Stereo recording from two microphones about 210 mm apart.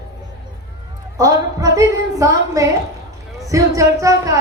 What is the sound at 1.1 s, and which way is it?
A woman's voice, 15° right (ahead or behind).